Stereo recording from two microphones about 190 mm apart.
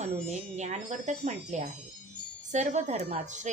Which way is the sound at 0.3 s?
40° right (ahead or behind).